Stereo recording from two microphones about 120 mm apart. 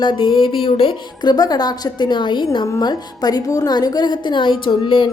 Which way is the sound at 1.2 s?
35° left (ahead or behind).